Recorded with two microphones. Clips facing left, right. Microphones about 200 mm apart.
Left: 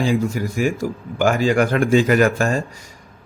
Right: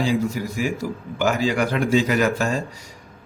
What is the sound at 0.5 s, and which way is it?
A man's voice, 50° left (ahead or behind).